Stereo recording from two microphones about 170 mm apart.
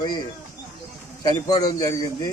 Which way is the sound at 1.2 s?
20° left (ahead or behind).